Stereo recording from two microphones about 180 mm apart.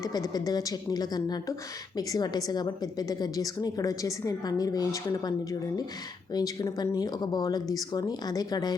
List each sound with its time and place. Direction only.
0.0 s a woman's voice: 20° left (ahead or behind)